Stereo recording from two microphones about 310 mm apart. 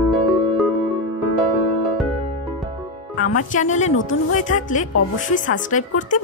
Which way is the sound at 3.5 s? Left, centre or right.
Left.